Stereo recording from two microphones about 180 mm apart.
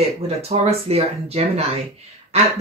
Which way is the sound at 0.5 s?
35° right (ahead or behind).